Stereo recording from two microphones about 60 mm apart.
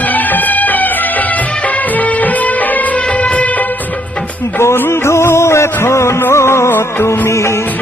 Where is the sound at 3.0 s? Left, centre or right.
Left.